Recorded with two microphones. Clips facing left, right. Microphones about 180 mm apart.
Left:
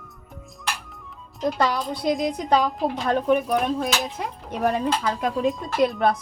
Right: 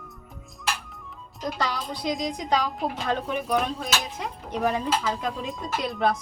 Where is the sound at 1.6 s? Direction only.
55° left (ahead or behind).